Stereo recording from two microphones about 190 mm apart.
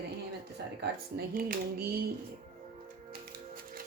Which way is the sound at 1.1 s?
50° right (ahead or behind).